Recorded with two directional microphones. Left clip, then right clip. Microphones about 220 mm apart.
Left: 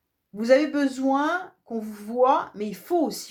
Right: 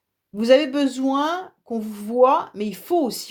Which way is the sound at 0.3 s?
40° right (ahead or behind).